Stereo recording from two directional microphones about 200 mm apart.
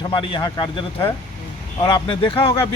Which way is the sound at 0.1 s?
25° left (ahead or behind).